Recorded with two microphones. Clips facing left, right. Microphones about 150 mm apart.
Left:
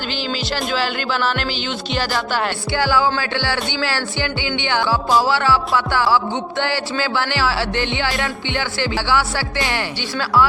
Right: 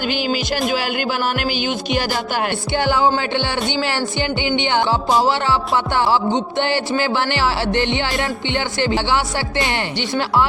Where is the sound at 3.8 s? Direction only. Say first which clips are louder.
Right 2 dB; 15° right (ahead or behind).